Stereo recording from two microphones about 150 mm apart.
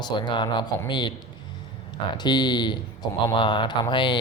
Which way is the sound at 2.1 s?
30° left (ahead or behind).